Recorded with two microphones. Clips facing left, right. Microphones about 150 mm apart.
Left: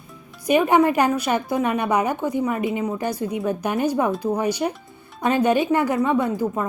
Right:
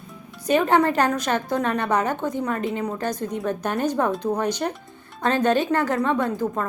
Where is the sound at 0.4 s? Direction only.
10° left (ahead or behind).